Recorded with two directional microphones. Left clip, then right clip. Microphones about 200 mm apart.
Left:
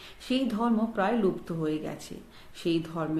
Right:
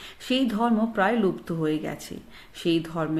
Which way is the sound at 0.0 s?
40° right (ahead or behind).